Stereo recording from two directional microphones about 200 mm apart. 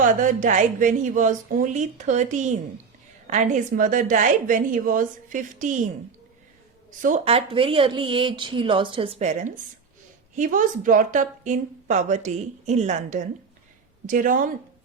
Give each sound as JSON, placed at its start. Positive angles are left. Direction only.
{"t": 0.0, "sound": "a woman's voice", "side_deg": -40}